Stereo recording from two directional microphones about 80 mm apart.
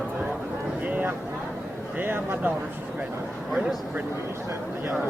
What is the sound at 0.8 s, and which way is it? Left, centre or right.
Speech, right.